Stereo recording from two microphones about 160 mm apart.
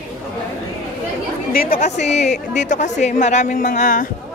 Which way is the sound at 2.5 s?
50° left (ahead or behind).